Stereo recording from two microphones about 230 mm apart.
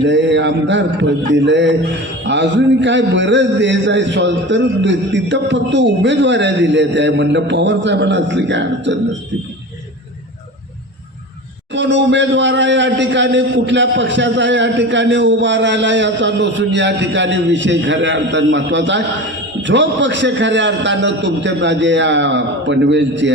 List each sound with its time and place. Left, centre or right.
0.0 s a man's voice: right
11.7 s a man's voice: right